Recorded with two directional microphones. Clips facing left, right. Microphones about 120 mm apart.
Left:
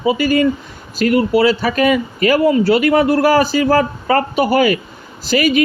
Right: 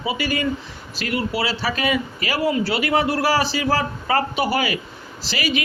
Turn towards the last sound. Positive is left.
turn(degrees=50)  # may be behind; listen again after turning